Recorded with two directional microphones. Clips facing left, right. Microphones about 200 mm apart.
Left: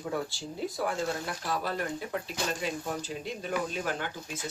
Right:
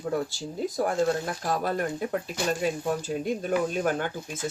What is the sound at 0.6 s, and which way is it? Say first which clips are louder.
Speech: right 6 dB; 45° right (ahead or behind).